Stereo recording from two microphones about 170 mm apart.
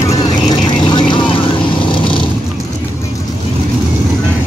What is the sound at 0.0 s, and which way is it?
Vehicle, 20° left (ahead or behind).